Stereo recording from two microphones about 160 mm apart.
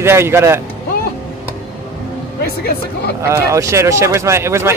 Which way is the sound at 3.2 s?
20° right (ahead or behind).